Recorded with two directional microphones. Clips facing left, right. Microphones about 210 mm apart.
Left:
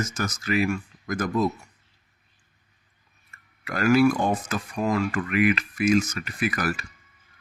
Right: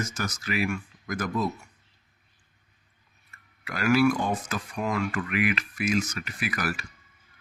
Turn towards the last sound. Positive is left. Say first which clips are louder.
# left 4 dB
turn(degrees=45)  # may be behind; listen again after turning